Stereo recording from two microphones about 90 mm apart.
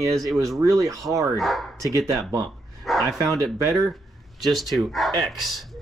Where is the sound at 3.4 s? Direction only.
35° right (ahead or behind).